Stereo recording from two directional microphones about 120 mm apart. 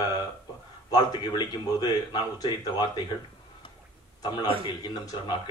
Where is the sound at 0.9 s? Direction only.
35° left (ahead or behind).